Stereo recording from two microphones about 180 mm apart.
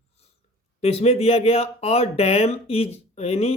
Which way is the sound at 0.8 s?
35° left (ahead or behind).